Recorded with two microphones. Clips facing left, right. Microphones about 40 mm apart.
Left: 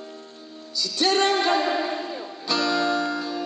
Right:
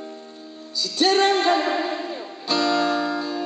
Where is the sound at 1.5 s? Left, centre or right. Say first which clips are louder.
Right 2 dB; centre.